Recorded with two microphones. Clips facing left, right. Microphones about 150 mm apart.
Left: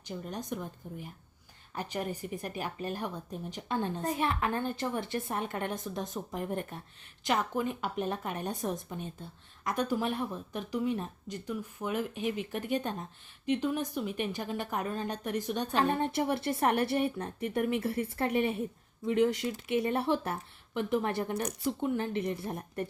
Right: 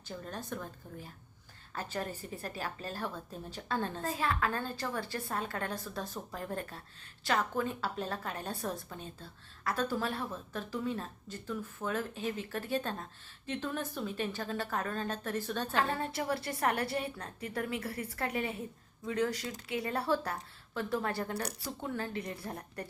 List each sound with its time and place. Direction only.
0.1 s a woman's voice: 15° left (ahead or behind)